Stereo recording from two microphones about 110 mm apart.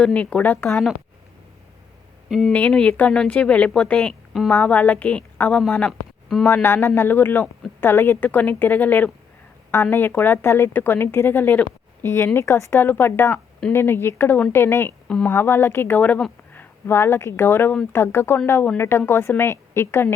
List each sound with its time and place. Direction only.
0.0 s a woman's voice: 10° left (ahead or behind)
2.5 s a woman's voice: 15° left (ahead or behind)
6.4 s a woman's voice: 20° left (ahead or behind)
15.0 s speech: 5° left (ahead or behind)
15.3 s speech: 20° left (ahead or behind)